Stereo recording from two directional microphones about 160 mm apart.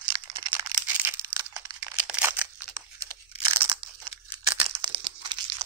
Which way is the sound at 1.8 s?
5° right (ahead or behind).